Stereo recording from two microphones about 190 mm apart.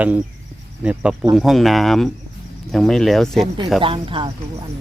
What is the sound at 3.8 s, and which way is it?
Speech, 30° right (ahead or behind).